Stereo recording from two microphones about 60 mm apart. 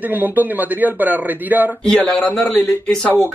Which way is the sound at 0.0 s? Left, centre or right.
Right.